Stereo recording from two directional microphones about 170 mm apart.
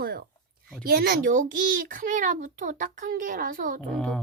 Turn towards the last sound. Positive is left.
turn(degrees=5)  # may be behind; listen again after turning